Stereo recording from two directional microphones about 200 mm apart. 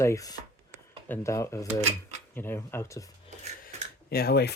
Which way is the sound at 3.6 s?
50° left (ahead or behind).